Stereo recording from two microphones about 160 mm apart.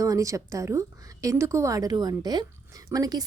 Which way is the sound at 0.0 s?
20° right (ahead or behind).